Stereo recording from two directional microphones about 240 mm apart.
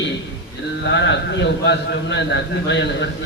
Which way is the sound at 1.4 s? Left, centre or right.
Left.